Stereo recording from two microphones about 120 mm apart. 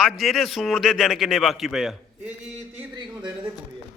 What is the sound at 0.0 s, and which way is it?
A man's voice, centre (ahead or behind).